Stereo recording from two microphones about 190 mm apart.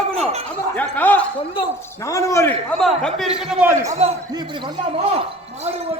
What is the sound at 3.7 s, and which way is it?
Speech, 15° right (ahead or behind).